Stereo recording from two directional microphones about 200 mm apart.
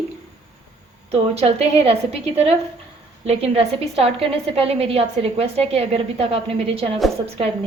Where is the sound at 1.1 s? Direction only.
30° right (ahead or behind).